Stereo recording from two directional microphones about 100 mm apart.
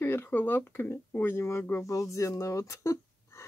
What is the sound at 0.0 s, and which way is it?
Speech, 20° left (ahead or behind).